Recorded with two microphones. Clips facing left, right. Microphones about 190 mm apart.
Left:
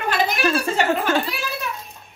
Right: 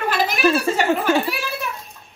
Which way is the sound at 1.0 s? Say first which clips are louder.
Right 3 dB; 10° right (ahead or behind).